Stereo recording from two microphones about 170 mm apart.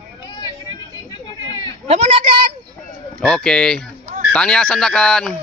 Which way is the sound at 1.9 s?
40° right (ahead or behind).